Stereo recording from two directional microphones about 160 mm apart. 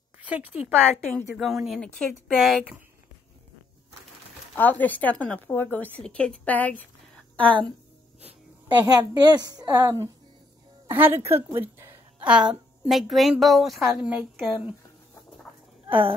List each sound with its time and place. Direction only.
0.2 s speech: 10° right (ahead or behind)
4.6 s a woman's voice: 10° left (ahead or behind)
8.7 s a woman's voice: 25° right (ahead or behind); by 14.8 s 5° right (ahead or behind)